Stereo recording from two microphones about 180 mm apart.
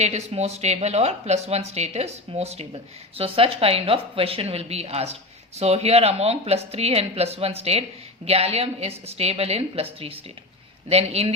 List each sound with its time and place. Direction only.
0.0 s a woman's voice: 40° right (ahead or behind)